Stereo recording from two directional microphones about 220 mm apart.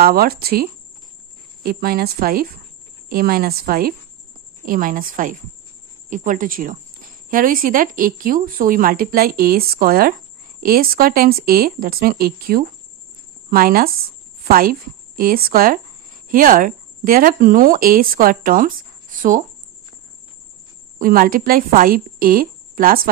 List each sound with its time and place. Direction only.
0.0 s a woman's voice: 45° right (ahead or behind)
21.0 s a woman's voice: 40° right (ahead or behind)